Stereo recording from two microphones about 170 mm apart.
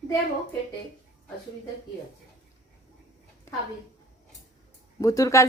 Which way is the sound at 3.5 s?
15° left (ahead or behind).